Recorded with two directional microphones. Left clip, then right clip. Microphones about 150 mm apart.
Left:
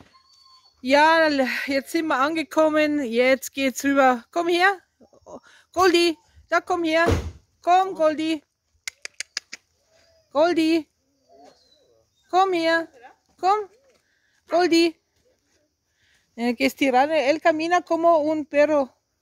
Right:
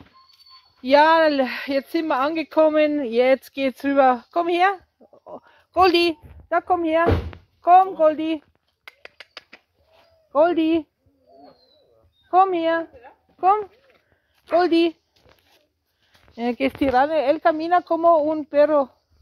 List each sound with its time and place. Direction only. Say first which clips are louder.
0.8 s speech: right 2 dB; 25° left (ahead or behind)
7.6 s scissors: right 4 dB; 30° left (ahead or behind)
10.3 s speech: right 2 dB; 30° left (ahead or behind)
12.3 s speech: right 2 dB; 35° left (ahead or behind)
16.3 s speech: even; 30° left (ahead or behind)